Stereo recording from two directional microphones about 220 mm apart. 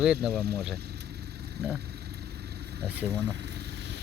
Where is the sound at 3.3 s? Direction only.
50° right (ahead or behind).